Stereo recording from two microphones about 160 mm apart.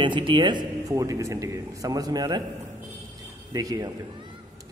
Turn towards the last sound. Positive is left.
turn(degrees=-20)  # may be behind; listen again after turning